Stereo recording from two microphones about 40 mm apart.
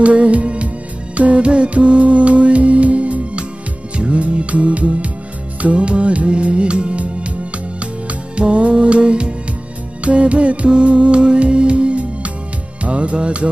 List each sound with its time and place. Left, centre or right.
0.0 s music: right